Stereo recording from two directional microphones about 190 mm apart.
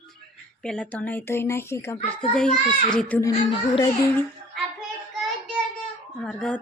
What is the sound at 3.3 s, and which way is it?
Speech, 25° left (ahead or behind).